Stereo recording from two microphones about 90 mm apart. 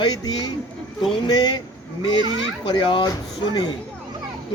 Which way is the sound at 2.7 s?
60° left (ahead or behind).